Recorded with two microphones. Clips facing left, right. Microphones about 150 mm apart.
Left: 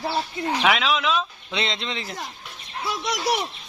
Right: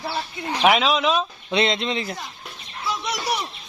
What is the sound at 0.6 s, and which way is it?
Speech, 25° right (ahead or behind).